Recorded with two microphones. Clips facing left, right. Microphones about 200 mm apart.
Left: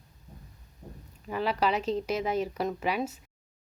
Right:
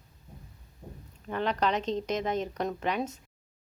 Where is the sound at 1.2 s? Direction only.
5° left (ahead or behind).